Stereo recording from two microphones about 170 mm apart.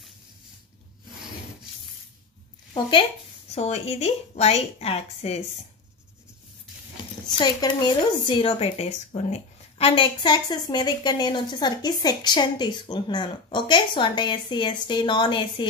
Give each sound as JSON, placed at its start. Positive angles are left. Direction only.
{"t": 2.7, "sound": "a woman's voice", "side_deg": 30}
{"t": 7.2, "sound": "speech", "side_deg": 25}